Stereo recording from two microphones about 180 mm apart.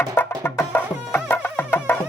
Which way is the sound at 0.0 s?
15° left (ahead or behind).